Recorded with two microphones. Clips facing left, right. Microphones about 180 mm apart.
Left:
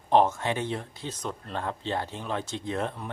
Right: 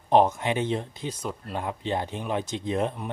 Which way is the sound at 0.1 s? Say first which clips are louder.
Right 2 dB; 15° right (ahead or behind).